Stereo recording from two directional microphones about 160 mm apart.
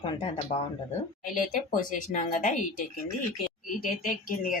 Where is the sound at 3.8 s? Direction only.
55° left (ahead or behind).